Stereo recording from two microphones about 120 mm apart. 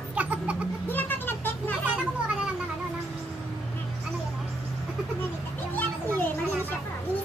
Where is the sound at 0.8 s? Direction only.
15° left (ahead or behind).